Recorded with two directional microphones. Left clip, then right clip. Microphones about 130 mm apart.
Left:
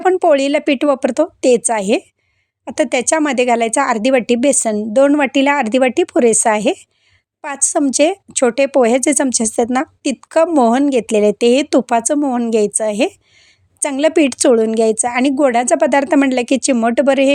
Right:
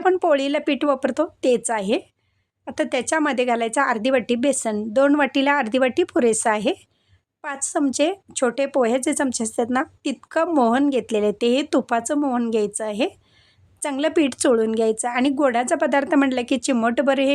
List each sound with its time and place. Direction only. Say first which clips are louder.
0.0 s a woman's voice: left 6 dB; 35° left (ahead or behind)
12.5 s a woman's voice: left 8 dB; 45° left (ahead or behind)